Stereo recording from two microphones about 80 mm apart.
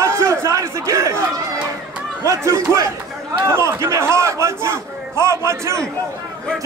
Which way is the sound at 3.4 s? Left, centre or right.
Right.